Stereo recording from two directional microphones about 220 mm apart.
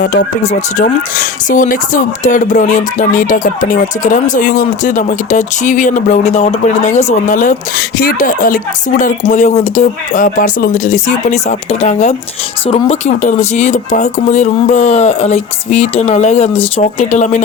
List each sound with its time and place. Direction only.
0.0 s speech: 40° left (ahead or behind)